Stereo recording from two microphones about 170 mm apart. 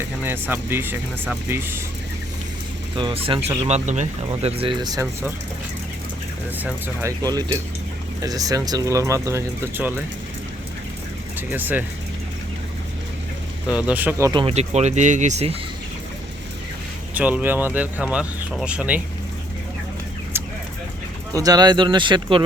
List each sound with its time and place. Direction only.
0.2 s speech: 10° right (ahead or behind)
2.9 s speech: 30° right (ahead or behind)
6.6 s speech: 10° right (ahead or behind)
11.3 s speech: 10° right (ahead or behind)
13.7 s speech: 5° right (ahead or behind)
14.3 s speech: 35° right (ahead or behind)
17.2 s speech: 10° right (ahead or behind)
20.3 s a sound: 15° right (ahead or behind)
21.3 s speech: 20° right (ahead or behind)